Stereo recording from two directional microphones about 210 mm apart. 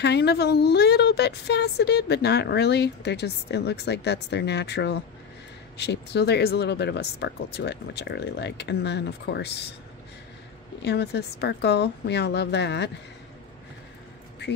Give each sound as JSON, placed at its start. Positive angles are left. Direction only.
{"t": 0.0, "sound": "a woman's voice", "side_deg": 50}
{"t": 10.8, "sound": "a woman's voice", "side_deg": 50}